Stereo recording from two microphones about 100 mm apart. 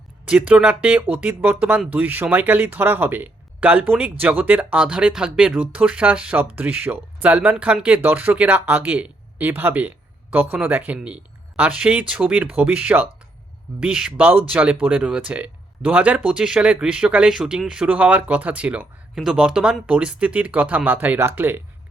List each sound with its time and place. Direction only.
0.3 s speech: 10° right (ahead or behind)